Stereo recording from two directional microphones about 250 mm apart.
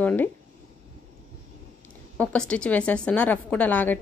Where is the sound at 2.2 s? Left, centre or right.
Centre.